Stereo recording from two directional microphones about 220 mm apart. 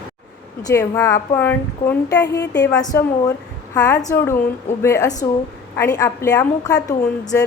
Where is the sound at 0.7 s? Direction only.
10° left (ahead or behind).